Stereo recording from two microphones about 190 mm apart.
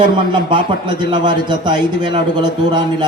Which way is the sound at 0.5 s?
25° right (ahead or behind).